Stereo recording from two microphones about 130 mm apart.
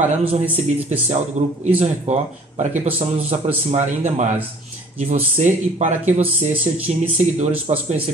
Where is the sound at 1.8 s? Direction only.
55° right (ahead or behind).